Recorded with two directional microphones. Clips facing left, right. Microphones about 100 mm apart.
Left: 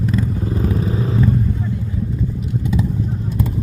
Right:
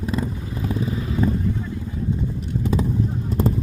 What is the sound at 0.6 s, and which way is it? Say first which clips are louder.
Vehicle: left 2 dB; 35° left (ahead or behind).